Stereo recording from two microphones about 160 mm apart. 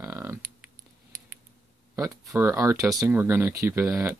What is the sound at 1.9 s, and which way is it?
Speech, 20° right (ahead or behind).